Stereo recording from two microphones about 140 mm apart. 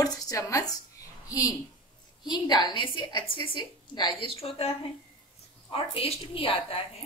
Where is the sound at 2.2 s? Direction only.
30° left (ahead or behind).